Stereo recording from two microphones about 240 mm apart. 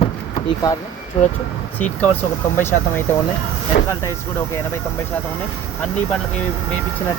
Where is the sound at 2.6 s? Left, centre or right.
Centre.